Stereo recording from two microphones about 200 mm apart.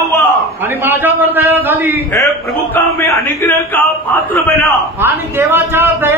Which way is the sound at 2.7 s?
15° left (ahead or behind).